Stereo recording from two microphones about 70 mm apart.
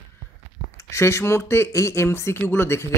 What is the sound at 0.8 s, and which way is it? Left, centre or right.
Speech, left.